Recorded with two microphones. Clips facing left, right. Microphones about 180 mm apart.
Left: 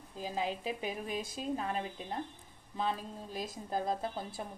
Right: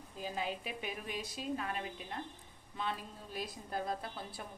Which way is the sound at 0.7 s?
35° left (ahead or behind).